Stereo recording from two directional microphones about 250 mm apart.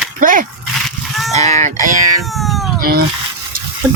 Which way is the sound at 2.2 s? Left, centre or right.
Centre.